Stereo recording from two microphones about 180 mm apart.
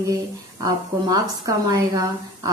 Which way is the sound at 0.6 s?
20° right (ahead or behind).